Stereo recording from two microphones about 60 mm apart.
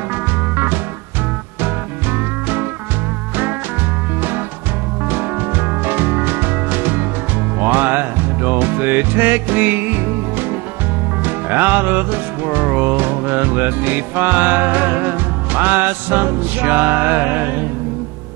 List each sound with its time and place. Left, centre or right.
0.1 s music: right
5.1 s music: right